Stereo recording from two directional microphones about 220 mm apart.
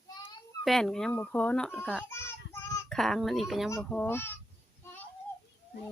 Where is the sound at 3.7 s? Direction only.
5° left (ahead or behind).